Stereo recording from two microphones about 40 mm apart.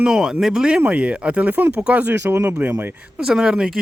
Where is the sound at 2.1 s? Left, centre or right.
Right.